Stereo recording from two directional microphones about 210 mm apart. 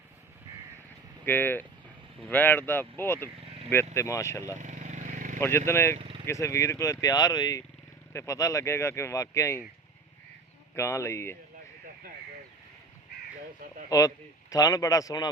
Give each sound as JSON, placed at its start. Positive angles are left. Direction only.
{"t": 1.2, "sound": "speech", "side_deg": 10}
{"t": 4.5, "sound": "vehicle", "side_deg": -35}
{"t": 5.4, "sound": "speech", "side_deg": 10}
{"t": 6.0, "sound": "vehicle", "side_deg": -25}
{"t": 6.2, "sound": "speech", "side_deg": 15}
{"t": 10.8, "sound": "speech", "side_deg": 15}
{"t": 13.9, "sound": "speech", "side_deg": 15}